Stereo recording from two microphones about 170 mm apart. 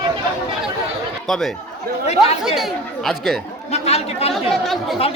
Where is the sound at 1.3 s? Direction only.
Centre (ahead or behind).